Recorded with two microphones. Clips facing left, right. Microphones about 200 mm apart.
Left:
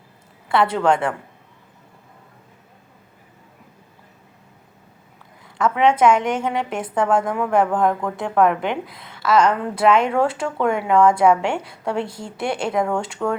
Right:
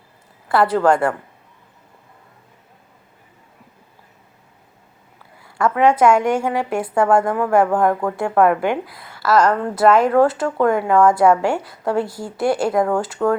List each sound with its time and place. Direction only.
0.6 s a woman's voice: 5° right (ahead or behind)
5.7 s a woman's voice: 5° right (ahead or behind)
12.0 s a woman's voice: 25° left (ahead or behind)
12.4 s a woman's voice: 5° right (ahead or behind)